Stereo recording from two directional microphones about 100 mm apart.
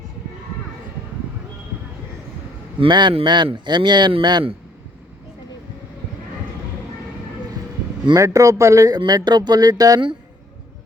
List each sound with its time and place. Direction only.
2.8 s a man's voice: 55° right (ahead or behind)
8.1 s a man's voice: 35° right (ahead or behind)
9.0 s speech: 45° right (ahead or behind)